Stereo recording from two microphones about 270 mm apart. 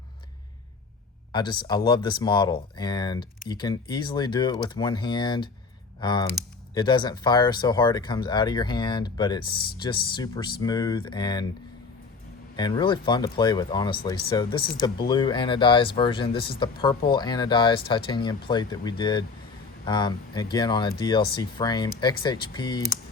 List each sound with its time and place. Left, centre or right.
1.3 s speech: centre
12.5 s speech: centre